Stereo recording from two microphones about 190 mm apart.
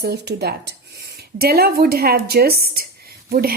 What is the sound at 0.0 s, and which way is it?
A woman's voice, 60° right (ahead or behind).